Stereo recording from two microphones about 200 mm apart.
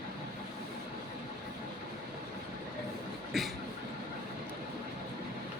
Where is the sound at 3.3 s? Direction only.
Centre (ahead or behind).